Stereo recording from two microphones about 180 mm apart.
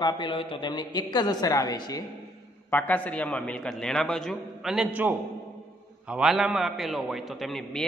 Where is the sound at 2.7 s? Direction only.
10° left (ahead or behind).